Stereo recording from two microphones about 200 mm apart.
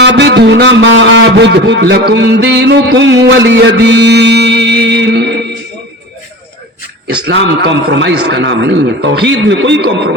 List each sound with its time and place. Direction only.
0.0 s a man's voice: 60° right (ahead or behind)
7.3 s a man's voice: 60° right (ahead or behind)